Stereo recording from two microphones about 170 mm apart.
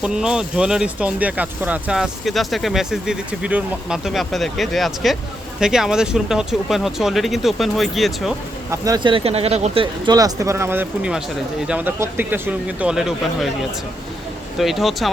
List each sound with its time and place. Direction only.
0.0 s speech: 5° right (ahead or behind)
8.7 s speech: 20° right (ahead or behind); by 9.8 s 40° right (ahead or behind)
9.8 s speech: 25° right (ahead or behind); by 15.1 s centre (ahead or behind)